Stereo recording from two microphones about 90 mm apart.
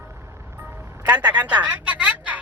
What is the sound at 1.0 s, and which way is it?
Speech, 45° right (ahead or behind).